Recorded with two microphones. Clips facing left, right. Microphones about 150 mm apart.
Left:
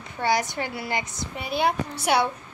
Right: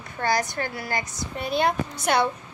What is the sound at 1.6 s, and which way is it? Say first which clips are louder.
Speech: left 1 dB; 10° left (ahead or behind).